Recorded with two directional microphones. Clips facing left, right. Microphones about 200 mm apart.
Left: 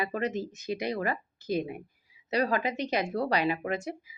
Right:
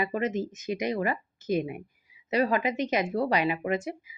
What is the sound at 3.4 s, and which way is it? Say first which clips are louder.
Speech: right 1 dB; 15° right (ahead or behind).